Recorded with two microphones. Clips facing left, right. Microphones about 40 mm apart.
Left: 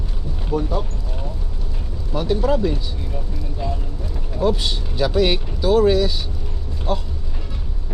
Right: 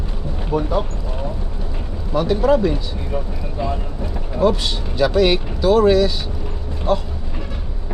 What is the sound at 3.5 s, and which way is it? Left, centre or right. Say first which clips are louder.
Vehicle: right 4 dB; right.